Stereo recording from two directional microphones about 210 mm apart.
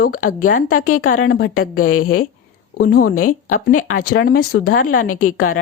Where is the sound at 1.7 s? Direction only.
90° left.